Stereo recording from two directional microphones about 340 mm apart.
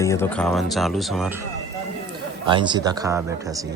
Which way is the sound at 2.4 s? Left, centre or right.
Centre.